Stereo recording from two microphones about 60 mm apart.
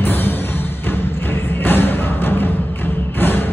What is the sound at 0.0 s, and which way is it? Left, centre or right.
Music, left.